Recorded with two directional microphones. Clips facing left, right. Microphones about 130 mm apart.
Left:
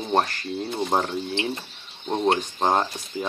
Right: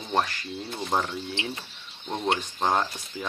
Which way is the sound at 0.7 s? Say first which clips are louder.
Left 3 dB; 30° left (ahead or behind).